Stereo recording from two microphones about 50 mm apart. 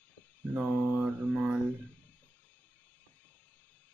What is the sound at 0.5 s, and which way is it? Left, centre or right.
Speech, right.